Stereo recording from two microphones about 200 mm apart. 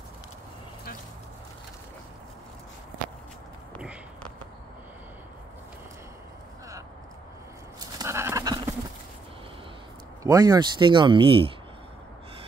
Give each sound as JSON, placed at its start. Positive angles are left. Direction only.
{"t": 8.0, "sound": "goat", "side_deg": -15}
{"t": 10.2, "sound": "speech", "side_deg": -20}